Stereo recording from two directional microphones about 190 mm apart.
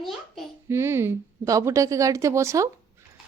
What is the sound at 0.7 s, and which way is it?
Speech, 10° right (ahead or behind).